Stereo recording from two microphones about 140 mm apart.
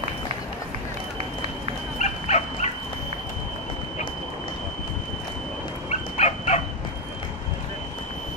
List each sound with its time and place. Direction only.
2.0 s dog: 55° left (ahead or behind)
5.9 s dog: 55° left (ahead or behind)